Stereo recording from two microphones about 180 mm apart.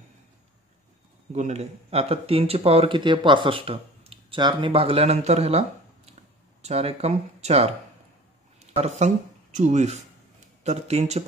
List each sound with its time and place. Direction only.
1.3 s speech: 40° right (ahead or behind)
8.7 s speech: 40° right (ahead or behind)